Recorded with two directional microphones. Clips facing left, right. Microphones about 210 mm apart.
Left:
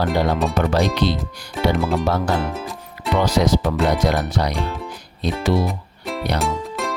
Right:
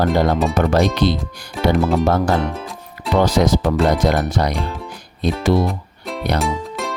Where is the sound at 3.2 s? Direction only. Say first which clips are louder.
Right 3 dB; 45° right (ahead or behind).